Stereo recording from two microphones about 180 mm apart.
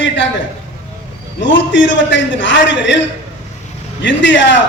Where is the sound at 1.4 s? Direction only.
90° left.